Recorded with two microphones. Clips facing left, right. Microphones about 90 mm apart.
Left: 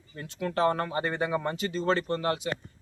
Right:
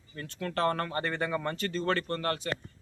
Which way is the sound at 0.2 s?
20° left (ahead or behind).